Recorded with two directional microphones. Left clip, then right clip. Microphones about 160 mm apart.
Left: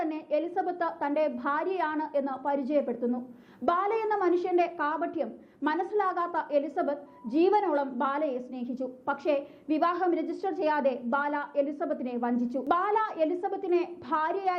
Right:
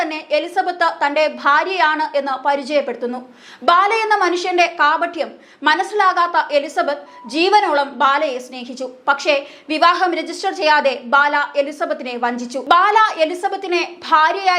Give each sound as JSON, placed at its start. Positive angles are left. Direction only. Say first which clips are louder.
{"t": 0.0, "sound": "a woman's voice", "louder": "right 11 dB", "side_deg": -10}